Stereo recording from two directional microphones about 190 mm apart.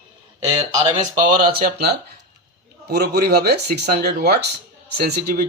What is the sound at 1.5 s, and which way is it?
Speech, 50° right (ahead or behind).